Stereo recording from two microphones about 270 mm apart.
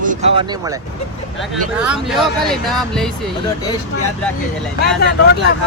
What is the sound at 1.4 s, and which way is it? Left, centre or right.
Speech, centre.